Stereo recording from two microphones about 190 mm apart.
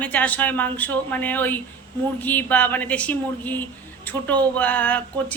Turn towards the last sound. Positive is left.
turn(degrees=10)  # may be behind; listen again after turning